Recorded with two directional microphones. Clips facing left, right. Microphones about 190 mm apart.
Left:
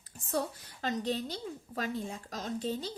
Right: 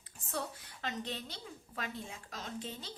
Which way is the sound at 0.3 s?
40° left (ahead or behind).